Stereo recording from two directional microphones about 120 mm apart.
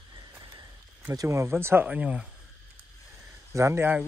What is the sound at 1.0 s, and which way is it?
Speech, 25° right (ahead or behind).